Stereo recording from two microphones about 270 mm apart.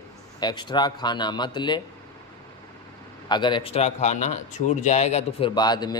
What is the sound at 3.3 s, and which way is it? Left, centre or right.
A man's voice, centre.